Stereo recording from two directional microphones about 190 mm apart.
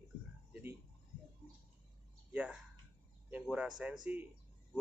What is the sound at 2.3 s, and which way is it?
Speech, 5° right (ahead or behind).